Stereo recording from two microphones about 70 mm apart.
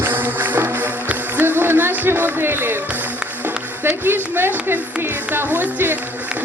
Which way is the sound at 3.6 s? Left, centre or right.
Right.